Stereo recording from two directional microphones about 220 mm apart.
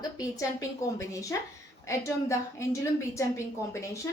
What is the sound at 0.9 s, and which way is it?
A woman's voice, 15° left (ahead or behind).